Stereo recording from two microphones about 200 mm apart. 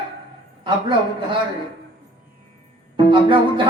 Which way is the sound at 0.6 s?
25° right (ahead or behind).